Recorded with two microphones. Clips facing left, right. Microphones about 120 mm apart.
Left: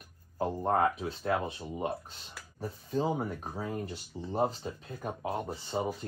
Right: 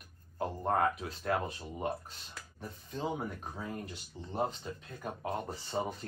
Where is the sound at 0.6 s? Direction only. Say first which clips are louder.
Left 2 dB; 20° left (ahead or behind).